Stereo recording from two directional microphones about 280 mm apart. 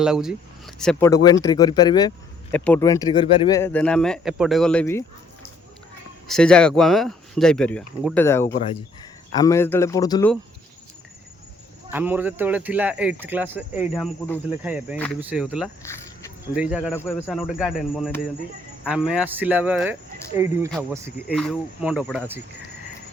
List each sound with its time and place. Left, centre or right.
0.0 s speech: centre
6.2 s speech: centre
11.9 s speech: centre
16.9 s speech: centre